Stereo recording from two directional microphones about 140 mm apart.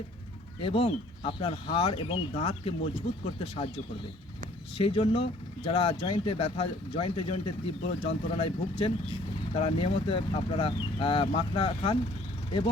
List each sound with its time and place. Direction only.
0.6 s speech: 45° left (ahead or behind)
4.8 s speech: 40° left (ahead or behind)